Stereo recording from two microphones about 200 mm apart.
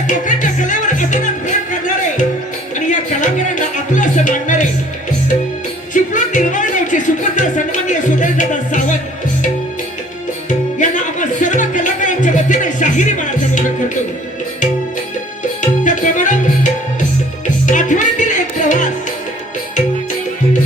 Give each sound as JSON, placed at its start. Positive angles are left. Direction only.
{"t": 0.1, "sound": "music", "side_deg": 40}
{"t": 2.7, "sound": "music", "side_deg": 40}
{"t": 5.9, "sound": "music", "side_deg": 40}
{"t": 10.8, "sound": "music", "side_deg": 40}
{"t": 15.8, "sound": "music", "side_deg": 40}
{"t": 17.7, "sound": "music", "side_deg": 40}